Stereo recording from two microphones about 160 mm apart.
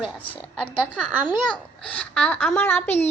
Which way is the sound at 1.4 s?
5° left (ahead or behind).